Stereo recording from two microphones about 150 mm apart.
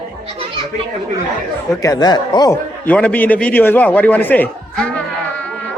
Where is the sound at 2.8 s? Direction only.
10° left (ahead or behind).